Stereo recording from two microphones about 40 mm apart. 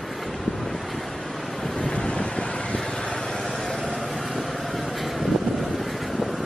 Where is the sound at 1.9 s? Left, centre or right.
Left.